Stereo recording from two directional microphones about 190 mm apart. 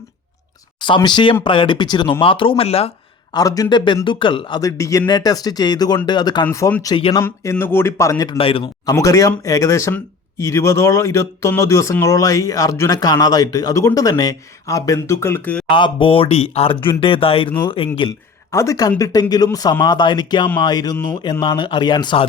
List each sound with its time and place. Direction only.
0.8 s a man's voice: 25° left (ahead or behind)
3.3 s a man's voice: 20° left (ahead or behind)
6.9 s a man's voice: 25° left (ahead or behind)
7.2 s speech: 10° left (ahead or behind)
15.7 s a man's voice: 25° left (ahead or behind)
18.5 s a man's voice: 15° left (ahead or behind)